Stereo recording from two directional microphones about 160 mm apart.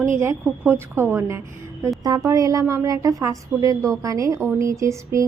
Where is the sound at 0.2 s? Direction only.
15° right (ahead or behind).